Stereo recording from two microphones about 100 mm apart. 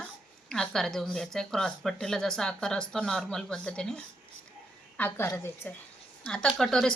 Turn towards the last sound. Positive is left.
turn(degrees=5)  # may be behind; listen again after turning